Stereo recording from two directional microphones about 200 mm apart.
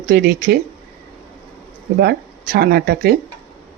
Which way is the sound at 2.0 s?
50° right (ahead or behind).